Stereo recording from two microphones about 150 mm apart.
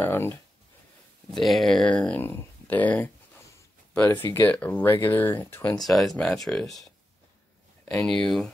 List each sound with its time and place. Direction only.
0.0 s speech: 15° left (ahead or behind)
1.3 s speech: centre (ahead or behind)
5.8 s speech: centre (ahead or behind)
8.1 s speech: 5° left (ahead or behind)